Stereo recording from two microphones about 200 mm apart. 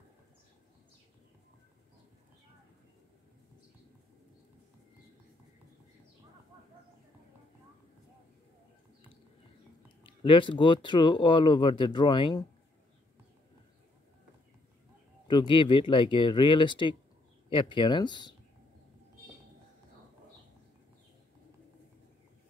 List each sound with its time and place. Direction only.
10.0 s speech: 25° left (ahead or behind)
15.2 s speech: 25° left (ahead or behind)